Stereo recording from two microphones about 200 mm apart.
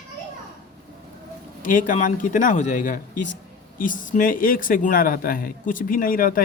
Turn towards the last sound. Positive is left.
turn(degrees=45)  # may be behind; listen again after turning